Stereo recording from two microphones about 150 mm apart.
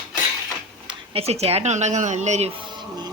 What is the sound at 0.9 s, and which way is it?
Speech, 40° right (ahead or behind).